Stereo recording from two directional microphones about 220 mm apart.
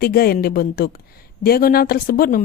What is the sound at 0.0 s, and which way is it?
A woman's voice, 45° left (ahead or behind).